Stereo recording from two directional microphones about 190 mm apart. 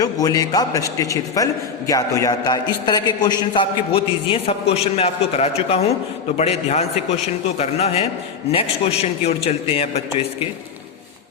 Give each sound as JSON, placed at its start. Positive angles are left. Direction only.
{"t": 0.0, "sound": "a man's voice", "side_deg": 20}